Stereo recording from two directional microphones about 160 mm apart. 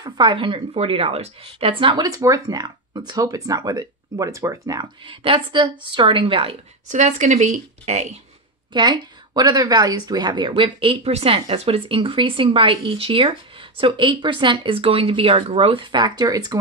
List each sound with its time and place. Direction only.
0.0 s a woman's voice: 30° right (ahead or behind)
6.9 s speech: 50° right (ahead or behind)
8.7 s a woman's voice: 25° right (ahead or behind)